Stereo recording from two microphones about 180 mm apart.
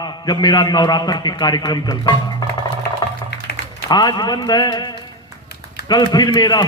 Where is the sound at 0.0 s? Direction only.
25° left (ahead or behind).